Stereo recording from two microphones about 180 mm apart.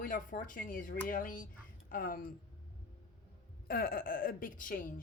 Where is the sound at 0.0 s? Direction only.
50° left (ahead or behind).